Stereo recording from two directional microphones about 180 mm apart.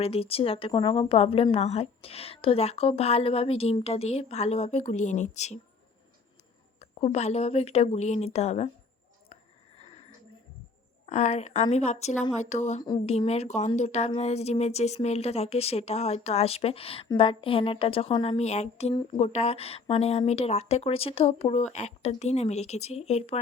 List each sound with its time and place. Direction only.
0.0 s a woman's voice: 35° left (ahead or behind)
6.7 s a woman's voice: 35° left (ahead or behind)
9.3 s a sound: 35° left (ahead or behind)
11.0 s a woman's voice: 40° left (ahead or behind)